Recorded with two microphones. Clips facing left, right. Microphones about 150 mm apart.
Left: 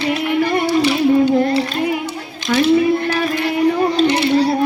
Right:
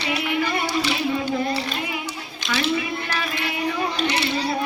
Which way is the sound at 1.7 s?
50° left (ahead or behind).